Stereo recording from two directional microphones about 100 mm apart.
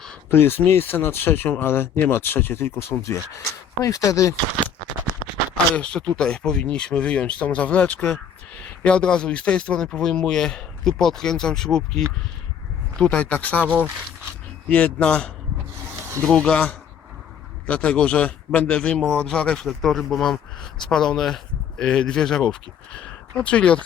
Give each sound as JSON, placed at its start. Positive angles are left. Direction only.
{"t": 0.3, "sound": "speech", "side_deg": 20}
{"t": 5.7, "sound": "speech", "side_deg": 10}
{"t": 14.7, "sound": "speech", "side_deg": 15}